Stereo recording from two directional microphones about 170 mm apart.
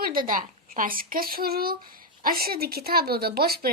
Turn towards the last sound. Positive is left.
turn(degrees=-65)  # may be behind; listen again after turning